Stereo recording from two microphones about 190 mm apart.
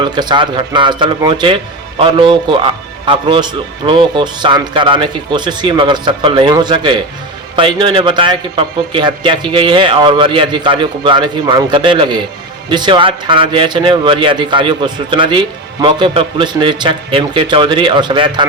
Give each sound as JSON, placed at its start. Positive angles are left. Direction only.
{"t": 0.0, "sound": "a man's voice", "side_deg": -25}